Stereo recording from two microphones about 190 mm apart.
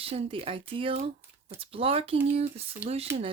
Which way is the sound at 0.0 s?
30° right (ahead or behind).